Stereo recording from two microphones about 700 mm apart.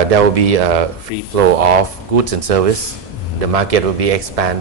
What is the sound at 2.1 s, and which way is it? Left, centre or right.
A man's voice, right.